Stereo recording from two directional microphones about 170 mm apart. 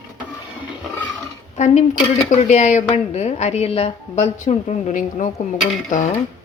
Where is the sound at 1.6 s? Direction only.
45° left (ahead or behind).